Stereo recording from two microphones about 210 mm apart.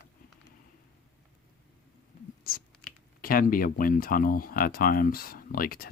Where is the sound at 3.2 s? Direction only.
45° left (ahead or behind).